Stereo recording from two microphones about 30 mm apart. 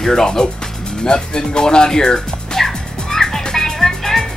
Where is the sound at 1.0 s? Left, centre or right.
Left.